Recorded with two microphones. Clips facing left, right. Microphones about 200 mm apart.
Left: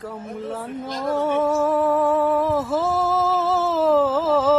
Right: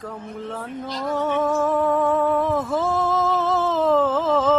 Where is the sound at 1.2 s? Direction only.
10° left (ahead or behind).